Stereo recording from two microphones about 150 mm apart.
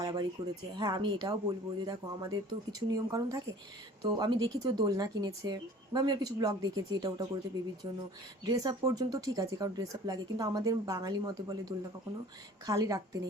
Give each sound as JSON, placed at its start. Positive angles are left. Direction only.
{"t": 0.0, "sound": "speech", "side_deg": -30}
{"t": 8.4, "sound": "speech", "side_deg": -25}